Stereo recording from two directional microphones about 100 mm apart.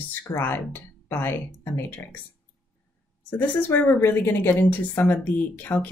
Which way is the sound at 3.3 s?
20° left (ahead or behind).